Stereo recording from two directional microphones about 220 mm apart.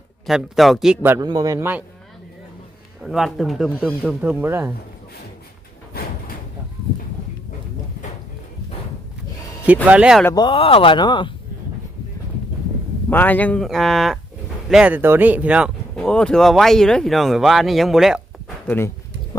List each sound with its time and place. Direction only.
0.3 s a man's voice: centre (ahead or behind)
3.0 s speech: centre (ahead or behind)
5.9 s a sound: 40° left (ahead or behind)
9.8 s speech: 5° right (ahead or behind)
10.2 s speech: 20° left (ahead or behind)
13.1 s speech: 10° left (ahead or behind)